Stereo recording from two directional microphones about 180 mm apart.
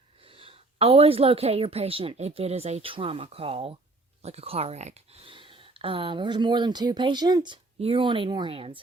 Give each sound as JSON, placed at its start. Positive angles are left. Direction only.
{"t": 0.3, "sound": "a woman's voice", "side_deg": -30}